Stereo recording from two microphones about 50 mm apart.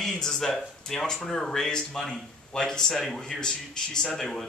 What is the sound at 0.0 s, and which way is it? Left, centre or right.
A man's voice, centre.